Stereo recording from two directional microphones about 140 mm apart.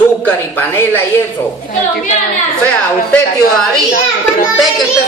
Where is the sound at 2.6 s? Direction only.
5° left (ahead or behind).